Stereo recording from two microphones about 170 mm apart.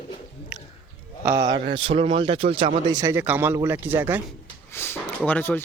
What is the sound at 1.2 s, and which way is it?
A man's voice, 20° right (ahead or behind).